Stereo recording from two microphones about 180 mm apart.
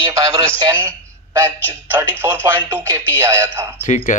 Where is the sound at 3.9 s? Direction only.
45° left (ahead or behind).